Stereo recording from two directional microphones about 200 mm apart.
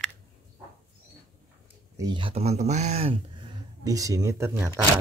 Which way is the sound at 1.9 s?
20° right (ahead or behind).